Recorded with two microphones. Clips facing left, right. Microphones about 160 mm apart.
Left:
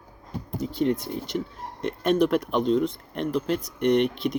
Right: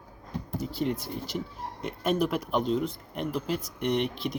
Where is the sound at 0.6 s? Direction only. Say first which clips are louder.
Left 6 dB; centre (ahead or behind).